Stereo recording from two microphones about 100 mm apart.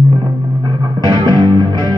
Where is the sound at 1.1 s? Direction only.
45° right (ahead or behind).